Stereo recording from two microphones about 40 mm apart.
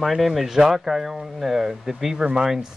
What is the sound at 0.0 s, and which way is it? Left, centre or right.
Speech, centre.